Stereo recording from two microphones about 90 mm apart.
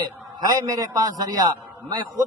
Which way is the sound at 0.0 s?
45° right (ahead or behind).